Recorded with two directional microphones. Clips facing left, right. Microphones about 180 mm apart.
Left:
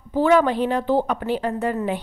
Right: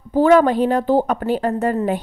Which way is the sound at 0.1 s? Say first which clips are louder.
Right 4 dB; 45° right (ahead or behind).